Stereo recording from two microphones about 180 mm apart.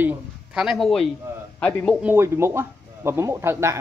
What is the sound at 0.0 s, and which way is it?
A man's voice, 5° right (ahead or behind).